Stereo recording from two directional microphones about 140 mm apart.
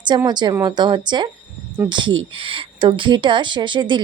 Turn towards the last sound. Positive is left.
turn(degrees=-35)  # may be behind; listen again after turning